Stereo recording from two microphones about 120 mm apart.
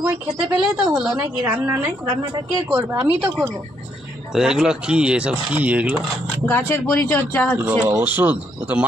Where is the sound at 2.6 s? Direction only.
15° right (ahead or behind).